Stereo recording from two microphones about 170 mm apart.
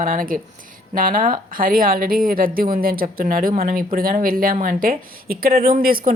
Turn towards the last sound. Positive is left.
turn(degrees=-60)  # may be behind; listen again after turning